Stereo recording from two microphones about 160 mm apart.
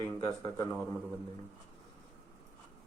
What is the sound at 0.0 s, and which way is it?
Speech, 25° left (ahead or behind).